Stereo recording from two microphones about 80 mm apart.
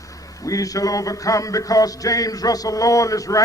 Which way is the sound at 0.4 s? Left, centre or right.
Left.